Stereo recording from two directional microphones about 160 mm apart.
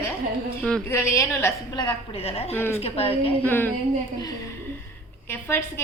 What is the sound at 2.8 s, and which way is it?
Speech, 40° left (ahead or behind).